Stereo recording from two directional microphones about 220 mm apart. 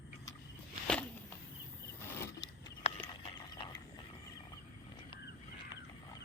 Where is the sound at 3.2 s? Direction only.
25° left (ahead or behind).